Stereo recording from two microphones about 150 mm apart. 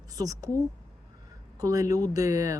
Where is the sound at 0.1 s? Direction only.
25° right (ahead or behind).